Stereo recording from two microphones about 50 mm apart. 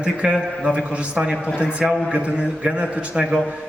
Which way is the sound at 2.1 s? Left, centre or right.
Right.